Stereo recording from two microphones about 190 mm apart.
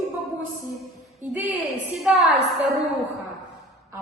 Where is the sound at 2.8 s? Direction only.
35° right (ahead or behind).